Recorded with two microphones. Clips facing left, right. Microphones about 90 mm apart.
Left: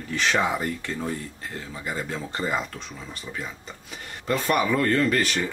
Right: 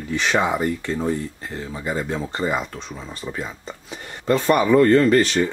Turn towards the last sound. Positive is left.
turn(degrees=-25)  # may be behind; listen again after turning